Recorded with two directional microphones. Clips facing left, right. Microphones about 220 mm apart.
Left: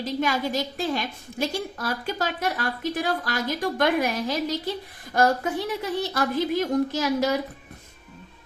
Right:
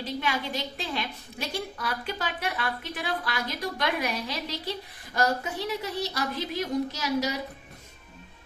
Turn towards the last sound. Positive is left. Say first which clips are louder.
# left 5 dB
turn(degrees=50)  # may be behind; listen again after turning